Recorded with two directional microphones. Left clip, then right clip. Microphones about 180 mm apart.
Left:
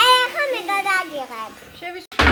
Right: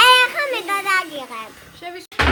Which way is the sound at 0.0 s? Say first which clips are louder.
Right 3 dB; 20° right (ahead or behind).